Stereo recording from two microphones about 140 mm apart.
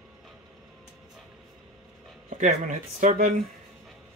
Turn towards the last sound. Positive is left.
turn(degrees=-65)  # may be behind; listen again after turning